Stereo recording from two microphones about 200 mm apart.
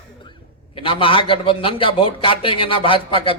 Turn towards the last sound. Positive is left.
turn(degrees=25)  # may be behind; listen again after turning